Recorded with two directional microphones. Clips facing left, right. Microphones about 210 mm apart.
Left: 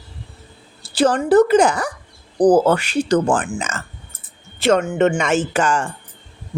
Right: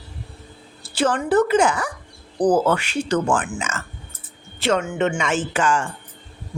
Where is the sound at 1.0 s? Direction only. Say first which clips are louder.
Left 5 dB; 35° left (ahead or behind).